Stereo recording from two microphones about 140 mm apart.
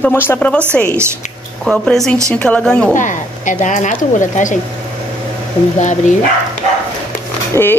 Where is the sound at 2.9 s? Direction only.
65° left (ahead or behind).